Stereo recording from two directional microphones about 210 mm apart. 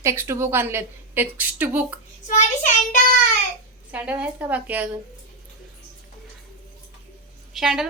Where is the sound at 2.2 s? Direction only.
35° left (ahead or behind).